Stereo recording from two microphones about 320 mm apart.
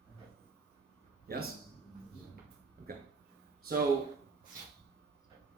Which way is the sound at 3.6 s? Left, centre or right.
Right.